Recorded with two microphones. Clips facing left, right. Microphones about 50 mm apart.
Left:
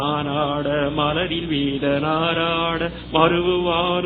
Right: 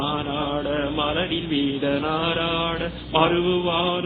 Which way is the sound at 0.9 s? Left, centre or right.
Centre.